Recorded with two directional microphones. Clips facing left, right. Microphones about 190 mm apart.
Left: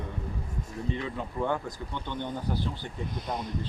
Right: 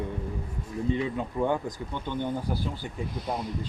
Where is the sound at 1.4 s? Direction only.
20° right (ahead or behind).